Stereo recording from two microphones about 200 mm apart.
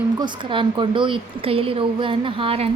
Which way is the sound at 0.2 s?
25° right (ahead or behind).